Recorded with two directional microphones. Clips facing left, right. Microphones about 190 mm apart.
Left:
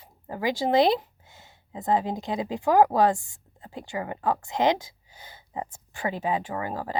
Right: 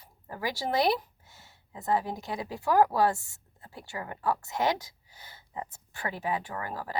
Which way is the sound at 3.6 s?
20° left (ahead or behind).